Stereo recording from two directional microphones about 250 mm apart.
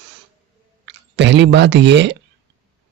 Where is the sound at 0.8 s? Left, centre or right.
Right.